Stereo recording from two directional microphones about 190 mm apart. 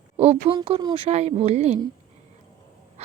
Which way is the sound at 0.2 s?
30° right (ahead or behind).